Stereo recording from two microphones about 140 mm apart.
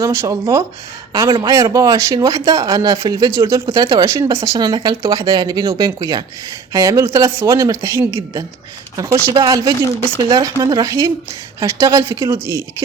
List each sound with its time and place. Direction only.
0.0 s speech: 20° right (ahead or behind)